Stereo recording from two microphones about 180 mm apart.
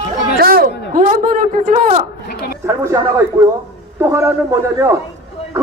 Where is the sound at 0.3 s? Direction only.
55° right (ahead or behind).